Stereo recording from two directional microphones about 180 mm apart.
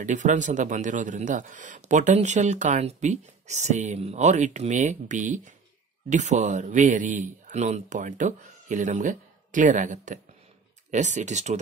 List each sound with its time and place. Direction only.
0.0 s speech: 45° right (ahead or behind)